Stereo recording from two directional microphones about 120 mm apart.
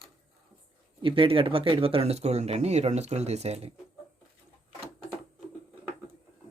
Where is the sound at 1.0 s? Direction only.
45° right (ahead or behind).